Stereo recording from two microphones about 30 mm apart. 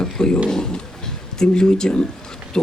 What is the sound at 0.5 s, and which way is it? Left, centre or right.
Speech, left.